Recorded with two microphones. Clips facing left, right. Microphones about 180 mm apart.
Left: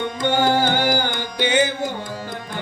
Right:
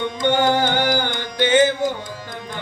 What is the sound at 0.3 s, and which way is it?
Carnatic music, 10° left (ahead or behind).